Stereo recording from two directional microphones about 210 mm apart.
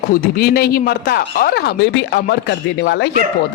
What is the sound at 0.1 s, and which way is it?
Speech, 45° left (ahead or behind).